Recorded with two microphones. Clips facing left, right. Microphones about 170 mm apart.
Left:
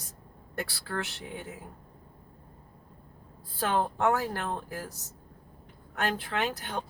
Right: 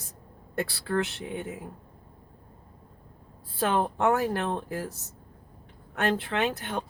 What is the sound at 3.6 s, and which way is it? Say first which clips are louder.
Speech: right 2 dB; 25° right (ahead or behind).